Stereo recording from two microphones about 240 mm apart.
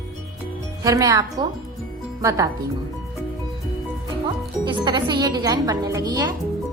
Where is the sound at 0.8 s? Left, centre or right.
Centre.